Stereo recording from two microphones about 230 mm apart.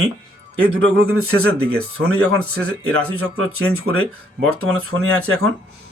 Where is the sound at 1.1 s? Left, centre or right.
Right.